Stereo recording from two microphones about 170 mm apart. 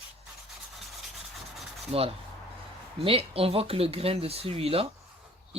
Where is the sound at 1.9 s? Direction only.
35° right (ahead or behind).